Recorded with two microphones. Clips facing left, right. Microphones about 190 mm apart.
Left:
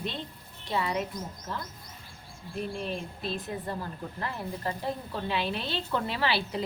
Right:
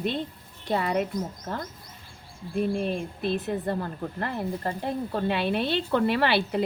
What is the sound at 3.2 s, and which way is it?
A woman's voice, 60° right (ahead or behind).